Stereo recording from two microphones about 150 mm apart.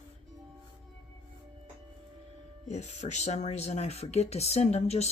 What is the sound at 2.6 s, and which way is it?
Speech, 50° left (ahead or behind).